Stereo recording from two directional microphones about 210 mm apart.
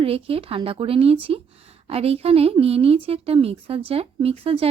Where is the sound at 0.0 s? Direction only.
25° right (ahead or behind).